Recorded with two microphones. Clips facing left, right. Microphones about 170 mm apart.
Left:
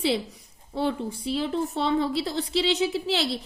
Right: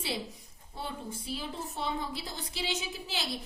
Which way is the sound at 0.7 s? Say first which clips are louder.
Left 12 dB; 80° left.